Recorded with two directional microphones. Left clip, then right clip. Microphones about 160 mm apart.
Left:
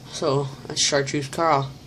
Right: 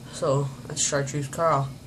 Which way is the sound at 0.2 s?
40° left (ahead or behind).